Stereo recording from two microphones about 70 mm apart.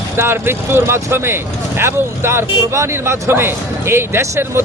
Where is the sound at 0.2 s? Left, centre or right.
Right.